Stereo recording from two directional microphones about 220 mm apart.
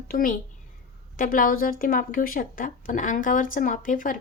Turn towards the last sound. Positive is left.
turn(degrees=35)  # may be behind; listen again after turning